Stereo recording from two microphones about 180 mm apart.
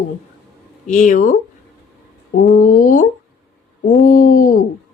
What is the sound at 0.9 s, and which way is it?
Speech, 45° left (ahead or behind).